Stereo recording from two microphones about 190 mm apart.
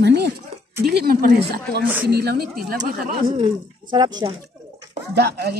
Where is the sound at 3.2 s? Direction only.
25° right (ahead or behind).